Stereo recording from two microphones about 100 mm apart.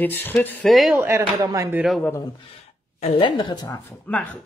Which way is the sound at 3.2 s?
50° left (ahead or behind).